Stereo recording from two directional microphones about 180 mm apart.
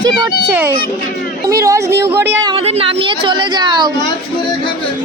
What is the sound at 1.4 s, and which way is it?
Speech, 20° right (ahead or behind).